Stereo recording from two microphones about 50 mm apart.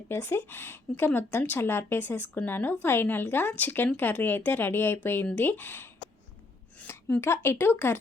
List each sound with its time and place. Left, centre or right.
0.1 s speech: left
7.2 s speech: left